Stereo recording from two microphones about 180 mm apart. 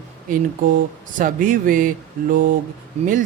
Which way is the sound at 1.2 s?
50° right (ahead or behind).